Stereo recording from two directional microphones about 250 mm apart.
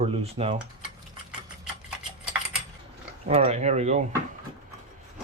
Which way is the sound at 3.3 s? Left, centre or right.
Right.